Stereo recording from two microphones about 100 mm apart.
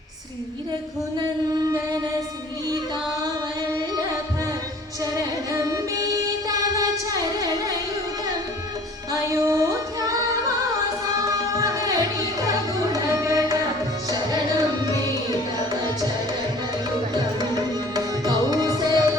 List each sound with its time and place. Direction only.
1.5 s singing: 35° right (ahead or behind)
5.1 s music: 35° right (ahead or behind)
7.1 s carnatic music: 40° right (ahead or behind)
9.1 s female singing: 35° right (ahead or behind)
11.1 s music: 35° right (ahead or behind)
17.2 s music: 40° right (ahead or behind)